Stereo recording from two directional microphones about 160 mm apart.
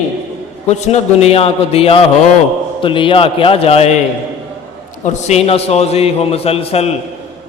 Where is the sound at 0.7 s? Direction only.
45° left (ahead or behind).